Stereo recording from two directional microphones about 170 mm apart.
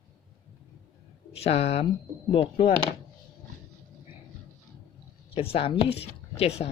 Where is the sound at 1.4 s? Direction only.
35° left (ahead or behind).